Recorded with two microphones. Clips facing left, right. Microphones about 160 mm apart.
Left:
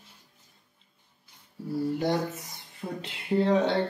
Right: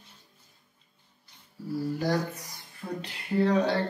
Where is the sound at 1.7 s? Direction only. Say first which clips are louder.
Left 1 dB; 25° left (ahead or behind).